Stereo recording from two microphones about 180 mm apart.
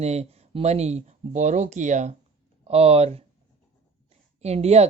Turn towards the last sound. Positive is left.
turn(degrees=-35)  # may be behind; listen again after turning